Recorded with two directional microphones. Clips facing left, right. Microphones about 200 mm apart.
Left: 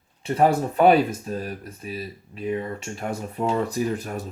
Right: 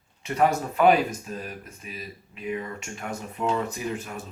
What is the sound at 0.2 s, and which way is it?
A man's voice, 30° left (ahead or behind).